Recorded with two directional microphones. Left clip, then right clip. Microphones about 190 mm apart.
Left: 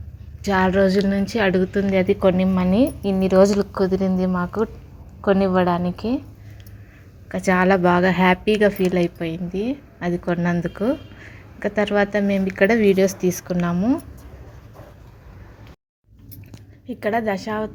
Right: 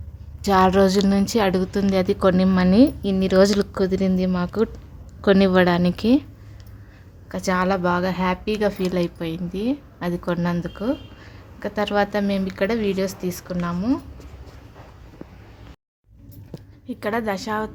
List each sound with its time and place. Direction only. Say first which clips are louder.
0.4 s a woman's voice: right 2 dB; 15° right (ahead or behind)
7.3 s a woman's voice: left 4 dB; 5° left (ahead or behind)
10.6 s a woman's voice: left 3 dB; 10° left (ahead or behind)
12.5 s a woman's voice: left 8 dB; 15° left (ahead or behind)
16.9 s a woman's voice: left 3 dB; centre (ahead or behind)